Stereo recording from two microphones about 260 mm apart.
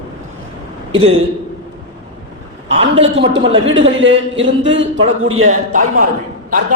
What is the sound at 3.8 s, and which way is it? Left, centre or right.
A man's voice, right.